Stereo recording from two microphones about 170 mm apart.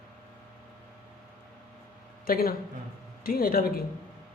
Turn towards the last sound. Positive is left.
turn(degrees=60)  # may be behind; listen again after turning